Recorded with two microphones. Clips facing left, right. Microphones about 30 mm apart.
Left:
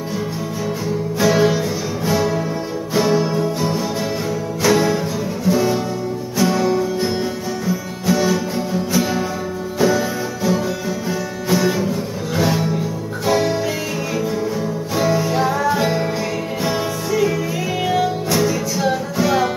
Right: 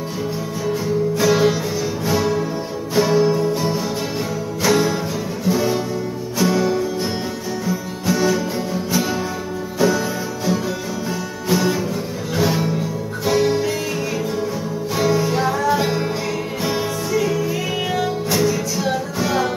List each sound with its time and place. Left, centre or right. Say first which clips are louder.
1.2 s music: left 3 dB; centre
15.0 s music: left 1 dB; centre